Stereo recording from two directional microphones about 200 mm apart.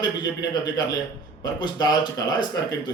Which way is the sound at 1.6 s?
20° left (ahead or behind).